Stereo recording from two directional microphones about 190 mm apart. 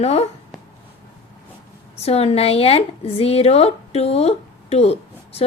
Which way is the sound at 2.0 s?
35° left (ahead or behind).